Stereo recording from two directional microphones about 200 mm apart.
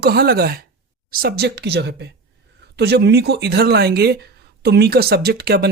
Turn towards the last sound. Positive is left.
turn(degrees=-50)  # may be behind; listen again after turning